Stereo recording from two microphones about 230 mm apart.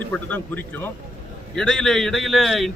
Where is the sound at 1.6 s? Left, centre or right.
Centre.